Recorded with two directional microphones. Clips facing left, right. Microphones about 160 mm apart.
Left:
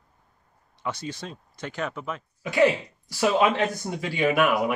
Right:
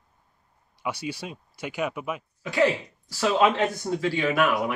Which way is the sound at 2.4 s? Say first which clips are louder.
Left 2 dB; 15° left (ahead or behind).